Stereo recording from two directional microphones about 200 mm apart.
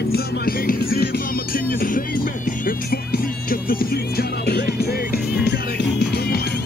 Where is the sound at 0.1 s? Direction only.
45° left (ahead or behind).